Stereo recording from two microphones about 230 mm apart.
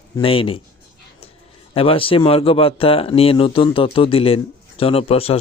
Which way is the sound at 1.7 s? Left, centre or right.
Left.